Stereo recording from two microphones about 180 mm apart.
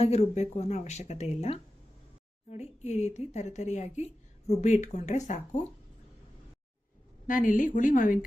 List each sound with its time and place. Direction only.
0.0 s speech: 35° left (ahead or behind)
7.3 s speech: 45° left (ahead or behind)